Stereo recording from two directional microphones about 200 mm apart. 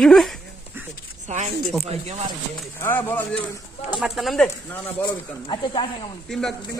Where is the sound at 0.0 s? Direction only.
Centre (ahead or behind).